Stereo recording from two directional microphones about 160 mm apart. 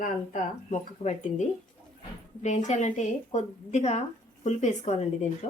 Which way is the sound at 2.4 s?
45° left (ahead or behind).